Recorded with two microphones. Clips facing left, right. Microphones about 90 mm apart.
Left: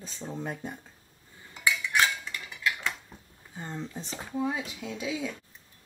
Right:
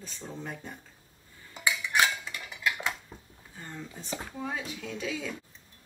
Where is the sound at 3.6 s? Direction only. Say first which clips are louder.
Left 5 dB; 20° left (ahead or behind).